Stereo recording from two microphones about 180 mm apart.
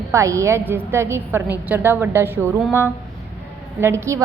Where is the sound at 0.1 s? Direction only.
15° right (ahead or behind).